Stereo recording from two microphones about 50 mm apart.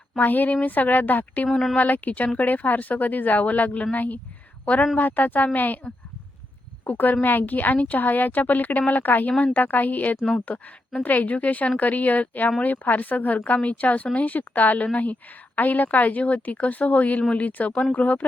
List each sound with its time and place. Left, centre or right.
0.2 s a woman's voice: left
6.8 s speech: left